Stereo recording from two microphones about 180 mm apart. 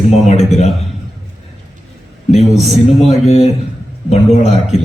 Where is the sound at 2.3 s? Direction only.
40° left (ahead or behind).